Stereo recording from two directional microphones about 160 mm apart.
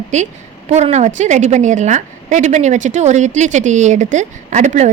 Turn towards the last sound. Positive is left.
turn(degrees=-45)  # may be behind; listen again after turning